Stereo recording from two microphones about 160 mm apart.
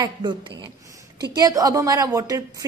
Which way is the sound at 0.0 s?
30° right (ahead or behind).